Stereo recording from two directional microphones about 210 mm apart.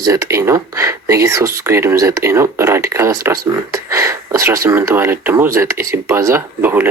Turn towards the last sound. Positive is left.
turn(degrees=-10)  # may be behind; listen again after turning